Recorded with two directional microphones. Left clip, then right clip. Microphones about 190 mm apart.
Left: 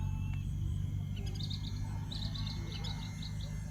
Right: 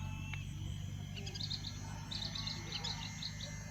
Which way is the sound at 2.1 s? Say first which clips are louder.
Right 3 dB; 65° left (ahead or behind).